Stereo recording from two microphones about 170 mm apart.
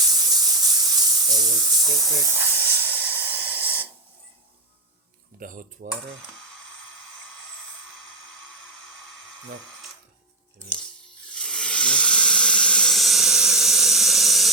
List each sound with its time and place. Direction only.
0.0 s steam: 25° right (ahead or behind)
5.4 s speech: 50° right (ahead or behind)
11.3 s hiss: 5° left (ahead or behind)